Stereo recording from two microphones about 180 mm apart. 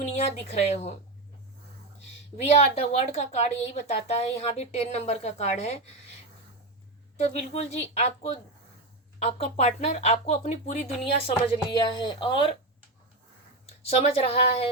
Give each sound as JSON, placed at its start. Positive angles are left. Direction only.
{"t": 0.0, "sound": "a woman's voice", "side_deg": 35}
{"t": 2.4, "sound": "a woman's voice", "side_deg": 35}
{"t": 7.2, "sound": "a woman's voice", "side_deg": 35}
{"t": 11.3, "sound": "speech", "side_deg": 25}
{"t": 13.8, "sound": "a woman's voice", "side_deg": 35}